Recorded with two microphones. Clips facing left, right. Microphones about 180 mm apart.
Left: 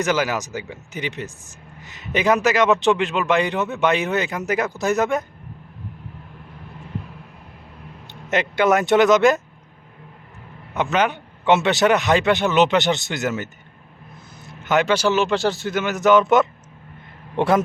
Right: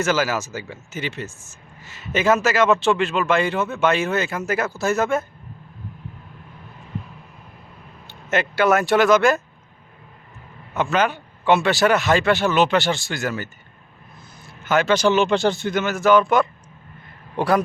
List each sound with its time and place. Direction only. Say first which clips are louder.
0.0 s a man's voice: even; 15° left (ahead or behind)
8.0 s speech: even; 20° left (ahead or behind)
10.8 s speech: even; 15° left (ahead or behind)
14.4 s vehicle: even; 20° left (ahead or behind)
14.9 s speech: right 2 dB; 5° left (ahead or behind)
15.9 s speech: left 1 dB; 20° left (ahead or behind)